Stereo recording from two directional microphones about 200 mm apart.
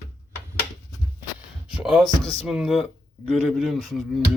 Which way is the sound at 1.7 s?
5° right (ahead or behind).